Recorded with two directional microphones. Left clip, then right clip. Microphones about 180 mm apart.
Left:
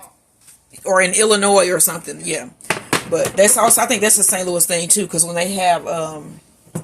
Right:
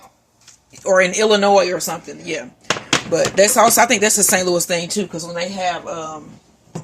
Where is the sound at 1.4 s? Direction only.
20° left (ahead or behind).